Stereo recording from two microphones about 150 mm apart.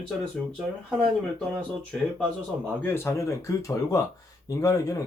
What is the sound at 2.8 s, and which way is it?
Speech, 15° left (ahead or behind).